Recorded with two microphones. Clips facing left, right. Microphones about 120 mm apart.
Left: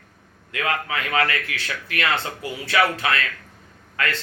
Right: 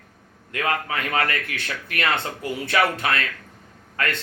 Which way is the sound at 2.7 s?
40° right (ahead or behind).